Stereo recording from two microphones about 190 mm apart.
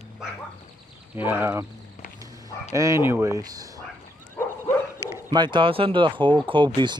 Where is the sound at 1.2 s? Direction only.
10° right (ahead or behind).